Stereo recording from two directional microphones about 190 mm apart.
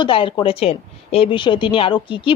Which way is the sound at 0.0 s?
25° left (ahead or behind).